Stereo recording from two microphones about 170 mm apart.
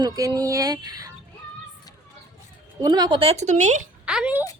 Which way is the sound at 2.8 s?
25° right (ahead or behind).